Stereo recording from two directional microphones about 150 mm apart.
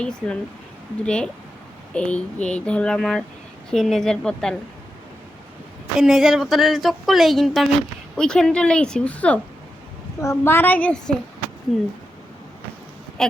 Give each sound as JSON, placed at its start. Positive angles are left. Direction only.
{"t": 0.0, "sound": "speech", "side_deg": 5}
{"t": 6.0, "sound": "speech", "side_deg": 0}